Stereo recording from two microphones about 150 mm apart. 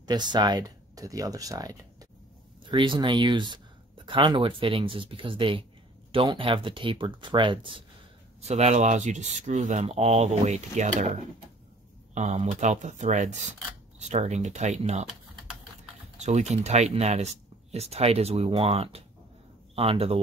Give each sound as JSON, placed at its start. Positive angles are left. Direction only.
{"t": 0.0, "sound": "speech", "side_deg": -30}
{"t": 8.4, "sound": "speech", "side_deg": -45}
{"t": 12.1, "sound": "speech", "side_deg": -50}
{"t": 16.2, "sound": "speech", "side_deg": -50}